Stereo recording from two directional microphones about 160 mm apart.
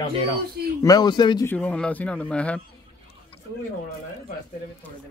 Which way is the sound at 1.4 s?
10° left (ahead or behind).